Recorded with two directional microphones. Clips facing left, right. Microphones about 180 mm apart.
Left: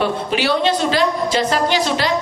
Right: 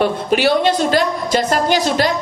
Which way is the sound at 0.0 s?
45° right (ahead or behind).